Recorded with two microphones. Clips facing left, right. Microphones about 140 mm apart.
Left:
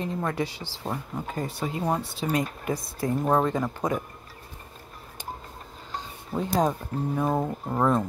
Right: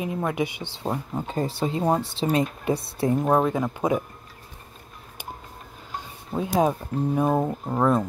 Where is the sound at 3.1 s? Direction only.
15° right (ahead or behind).